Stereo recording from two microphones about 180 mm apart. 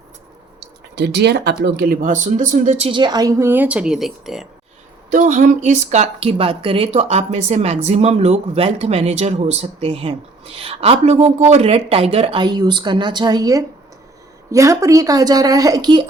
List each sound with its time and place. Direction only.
0.9 s a woman's voice: 70° right (ahead or behind); by 4.4 s centre (ahead or behind)
5.1 s a woman's voice: 40° right (ahead or behind); by 16.0 s 25° right (ahead or behind)